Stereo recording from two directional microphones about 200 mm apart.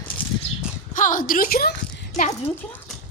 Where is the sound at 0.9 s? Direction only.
40° left (ahead or behind).